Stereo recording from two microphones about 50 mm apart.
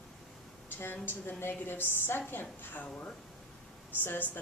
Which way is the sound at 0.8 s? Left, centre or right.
Left.